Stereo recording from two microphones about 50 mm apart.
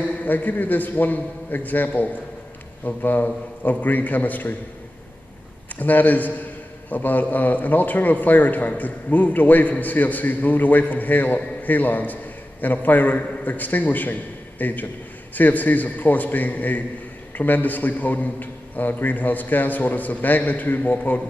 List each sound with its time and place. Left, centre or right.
0.2 s a man's voice: left
5.8 s a man's voice: left